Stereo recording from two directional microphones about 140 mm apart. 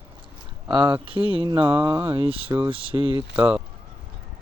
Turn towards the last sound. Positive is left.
turn(degrees=-10)  # may be behind; listen again after turning